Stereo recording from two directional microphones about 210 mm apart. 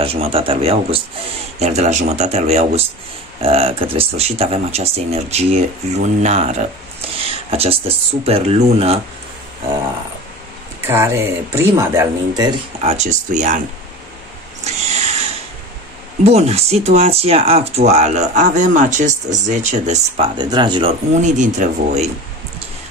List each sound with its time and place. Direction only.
0.0 s speech: 25° right (ahead or behind)
7.2 s a sound: 30° right (ahead or behind)
8.3 s speech: 30° right (ahead or behind)
10.9 s speech: 10° right (ahead or behind)
12.9 s speech: 35° right (ahead or behind)
14.6 s cat: 30° right (ahead or behind)
16.3 s speech: 30° right (ahead or behind)
20.3 s speech: 20° right (ahead or behind)
21.1 s speech: 35° right (ahead or behind)